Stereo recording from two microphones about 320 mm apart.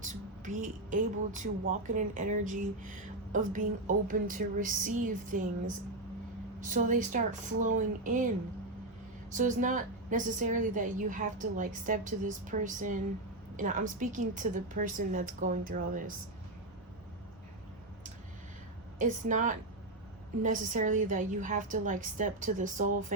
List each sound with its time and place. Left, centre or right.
0.1 s speech: right
9.3 s speech: right
18.9 s speech: right